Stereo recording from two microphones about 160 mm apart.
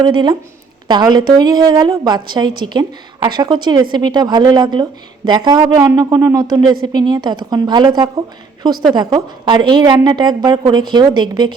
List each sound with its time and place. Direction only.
0.0 s a woman's voice: 30° right (ahead or behind)